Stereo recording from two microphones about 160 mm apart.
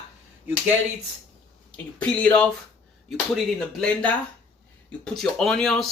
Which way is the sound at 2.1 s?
10° left (ahead or behind).